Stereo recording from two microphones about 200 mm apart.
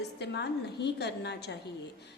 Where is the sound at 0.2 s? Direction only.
55° left (ahead or behind).